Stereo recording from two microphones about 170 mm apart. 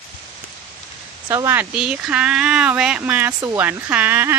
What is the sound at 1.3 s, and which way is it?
Speech, 15° right (ahead or behind).